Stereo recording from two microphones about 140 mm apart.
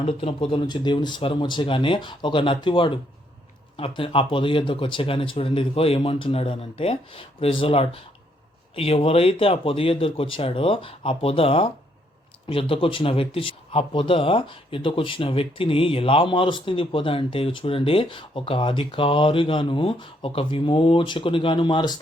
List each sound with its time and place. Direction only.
0.0 s speech: 40° left (ahead or behind)